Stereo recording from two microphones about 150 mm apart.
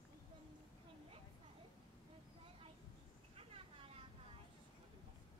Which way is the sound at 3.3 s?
40° right (ahead or behind).